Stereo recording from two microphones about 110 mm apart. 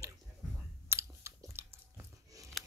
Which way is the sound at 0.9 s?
25° right (ahead or behind).